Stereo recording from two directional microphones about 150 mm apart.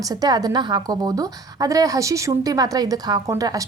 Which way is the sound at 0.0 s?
25° right (ahead or behind).